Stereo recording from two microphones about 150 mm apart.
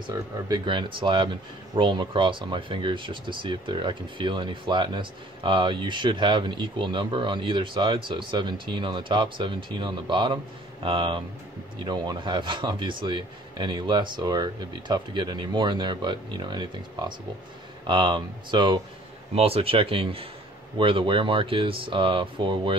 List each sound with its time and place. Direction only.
0.5 s speech: 30° right (ahead or behind)
17.8 s speech: 30° right (ahead or behind)